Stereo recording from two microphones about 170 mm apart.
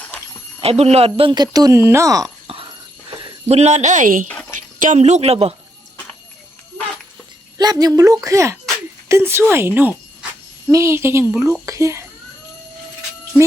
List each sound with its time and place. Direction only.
0.6 s speech: 35° right (ahead or behind); by 2.3 s 20° right (ahead or behind)
3.1 s speech: 40° right (ahead or behind)
7.6 s a woman's voice: 25° right (ahead or behind)